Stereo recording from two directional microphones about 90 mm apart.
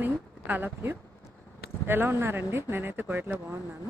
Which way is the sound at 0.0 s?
20° right (ahead or behind).